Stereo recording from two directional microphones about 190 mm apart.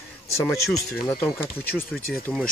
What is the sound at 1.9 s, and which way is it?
Speech, centre (ahead or behind).